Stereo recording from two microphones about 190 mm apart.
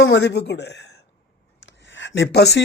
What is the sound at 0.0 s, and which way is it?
Speech, 60° left (ahead or behind).